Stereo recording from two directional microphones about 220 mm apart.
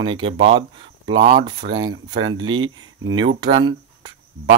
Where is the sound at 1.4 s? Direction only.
20° right (ahead or behind).